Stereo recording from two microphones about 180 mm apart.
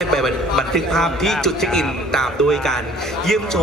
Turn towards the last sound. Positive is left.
turn(degrees=0)  # may be behind; listen again after turning